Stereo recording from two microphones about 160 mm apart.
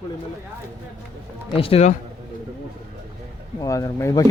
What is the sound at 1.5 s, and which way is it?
Speech, 35° left (ahead or behind).